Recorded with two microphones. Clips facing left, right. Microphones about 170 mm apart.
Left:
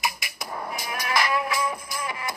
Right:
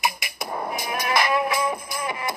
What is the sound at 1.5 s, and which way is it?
Music, 55° right (ahead or behind).